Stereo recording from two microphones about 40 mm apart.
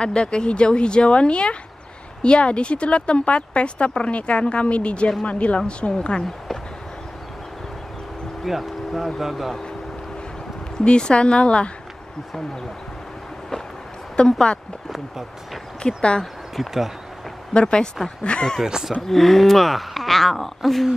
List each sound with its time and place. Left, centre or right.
0.0 s speech: left
8.5 s speech: centre
10.8 s speech: left
14.1 s speech: left
14.9 s speech: centre
16.0 s speech: left
16.5 s speech: centre
17.6 s speech: left
18.7 s speech: centre
18.9 s speech: centre